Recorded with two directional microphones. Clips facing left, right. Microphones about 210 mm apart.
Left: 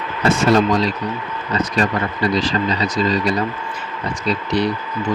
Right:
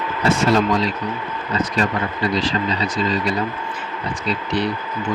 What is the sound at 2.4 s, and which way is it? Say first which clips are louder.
Speech: left 2 dB; 40° left (ahead or behind).